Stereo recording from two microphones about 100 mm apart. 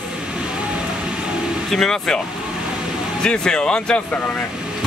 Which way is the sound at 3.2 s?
10° left (ahead or behind).